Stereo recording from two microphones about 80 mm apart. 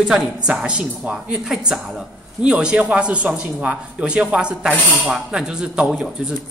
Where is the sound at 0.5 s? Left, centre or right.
Centre.